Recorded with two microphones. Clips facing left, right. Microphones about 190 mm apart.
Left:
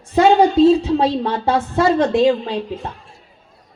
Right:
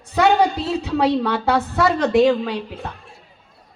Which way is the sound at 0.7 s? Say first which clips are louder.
Left 4 dB; 25° left (ahead or behind).